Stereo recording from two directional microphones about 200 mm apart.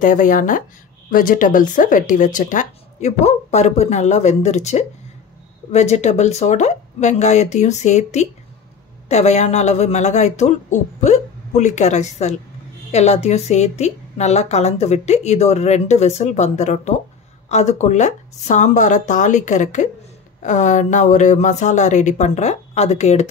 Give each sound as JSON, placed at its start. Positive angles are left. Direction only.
{"t": 0.0, "sound": "a woman's voice", "side_deg": 40}